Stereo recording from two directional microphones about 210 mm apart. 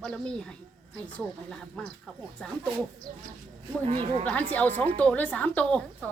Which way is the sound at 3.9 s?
25° right (ahead or behind).